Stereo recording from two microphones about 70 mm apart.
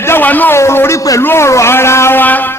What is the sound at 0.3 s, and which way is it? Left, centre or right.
Speech, left.